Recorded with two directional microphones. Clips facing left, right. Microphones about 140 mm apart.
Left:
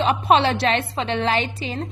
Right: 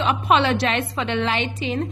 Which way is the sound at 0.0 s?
35° left (ahead or behind).